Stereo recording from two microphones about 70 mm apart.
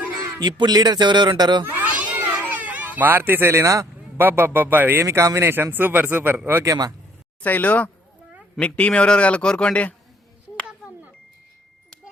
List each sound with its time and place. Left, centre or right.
0.3 s a man's voice: right
1.7 s children playing: right
2.5 s cat: right
3.6 s speech: right
4.2 s a man's voice: right
5.0 s speech: right
5.7 s speech: right
6.7 s speech: right
7.4 s a man's voice: left